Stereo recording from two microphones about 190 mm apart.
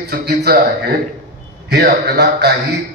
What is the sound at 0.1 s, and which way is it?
A man's voice, 60° right (ahead or behind).